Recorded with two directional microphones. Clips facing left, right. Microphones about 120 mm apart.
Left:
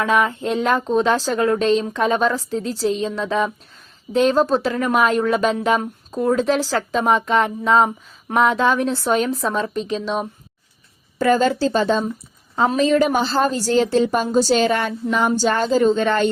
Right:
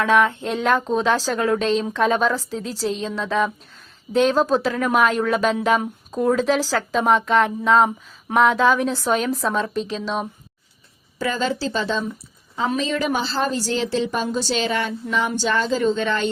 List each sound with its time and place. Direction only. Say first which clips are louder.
0.0 s a woman's voice: right 1 dB; centre (ahead or behind)
11.2 s a woman's voice: left 7 dB; 50° left (ahead or behind)